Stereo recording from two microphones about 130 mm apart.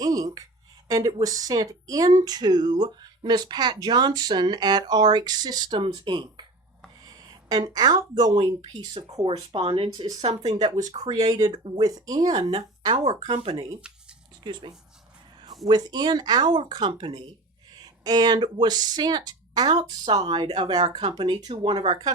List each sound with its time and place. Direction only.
0.0 s a sound: 25° right (ahead or behind)
0.9 s speech: 25° right (ahead or behind); by 10.4 s 45° right (ahead or behind)
11.1 s speech: 30° right (ahead or behind)
13.3 s speech: 45° right (ahead or behind)
14.4 s speech: 35° right (ahead or behind)